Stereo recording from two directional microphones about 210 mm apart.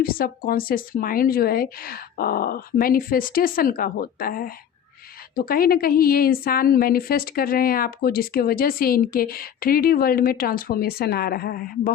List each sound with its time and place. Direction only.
0.0 s a woman's voice: 45° left (ahead or behind)